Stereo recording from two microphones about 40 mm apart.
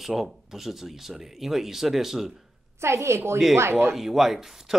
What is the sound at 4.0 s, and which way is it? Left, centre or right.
Speech, centre.